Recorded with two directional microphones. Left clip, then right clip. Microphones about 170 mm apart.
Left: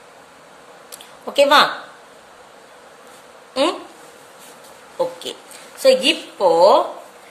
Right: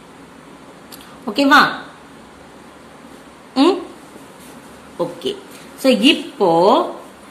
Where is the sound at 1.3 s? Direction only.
35° left (ahead or behind).